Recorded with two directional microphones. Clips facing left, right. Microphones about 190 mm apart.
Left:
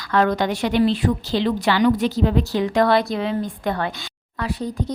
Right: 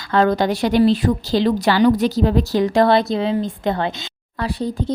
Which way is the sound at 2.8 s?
25° right (ahead or behind).